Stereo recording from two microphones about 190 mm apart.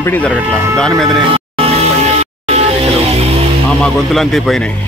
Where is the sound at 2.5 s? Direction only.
35° right (ahead or behind).